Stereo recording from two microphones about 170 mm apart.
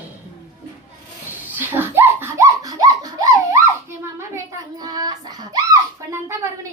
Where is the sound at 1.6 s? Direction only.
15° right (ahead or behind).